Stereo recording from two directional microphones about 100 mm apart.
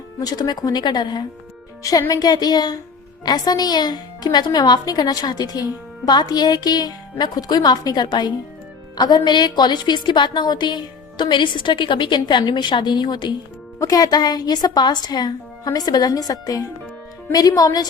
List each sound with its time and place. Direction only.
0.2 s a woman's voice: 40° left (ahead or behind)
13.7 s a woman's voice: 35° left (ahead or behind)